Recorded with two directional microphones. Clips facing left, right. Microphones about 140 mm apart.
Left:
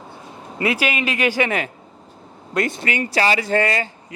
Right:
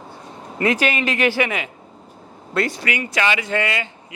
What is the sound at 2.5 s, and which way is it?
Speech, 20° left (ahead or behind).